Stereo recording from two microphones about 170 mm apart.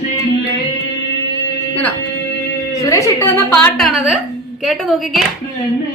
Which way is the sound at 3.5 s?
5° left (ahead or behind).